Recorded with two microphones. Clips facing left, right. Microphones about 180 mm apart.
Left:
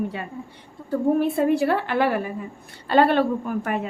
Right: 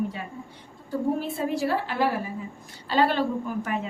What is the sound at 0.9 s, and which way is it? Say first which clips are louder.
A woman's voice: left 6 dB; 60° left (ahead or behind).